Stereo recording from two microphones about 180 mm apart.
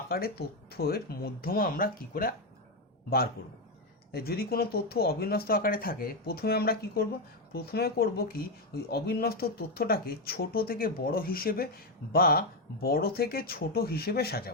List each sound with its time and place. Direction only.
0.1 s speech: 60° left (ahead or behind)
4.1 s speech: 60° left (ahead or behind)